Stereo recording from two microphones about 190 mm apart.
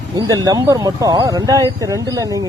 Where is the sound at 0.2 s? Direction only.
20° right (ahead or behind).